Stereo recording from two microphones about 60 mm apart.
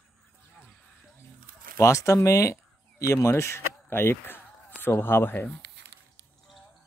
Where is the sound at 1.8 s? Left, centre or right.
Left.